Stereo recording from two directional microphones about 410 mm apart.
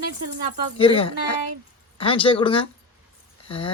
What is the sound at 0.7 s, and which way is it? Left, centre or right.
Speech, centre.